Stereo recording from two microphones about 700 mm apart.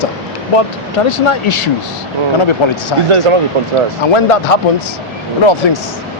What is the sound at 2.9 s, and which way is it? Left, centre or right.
Speech, left.